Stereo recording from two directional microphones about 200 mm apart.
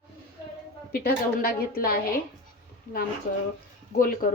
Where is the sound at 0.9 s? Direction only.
50° left (ahead or behind).